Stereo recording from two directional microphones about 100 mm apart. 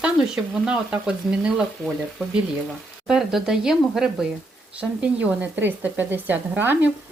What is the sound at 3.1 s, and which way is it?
Speech, 5° right (ahead or behind).